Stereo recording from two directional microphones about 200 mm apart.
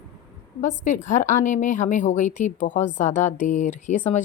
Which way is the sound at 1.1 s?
40° left (ahead or behind).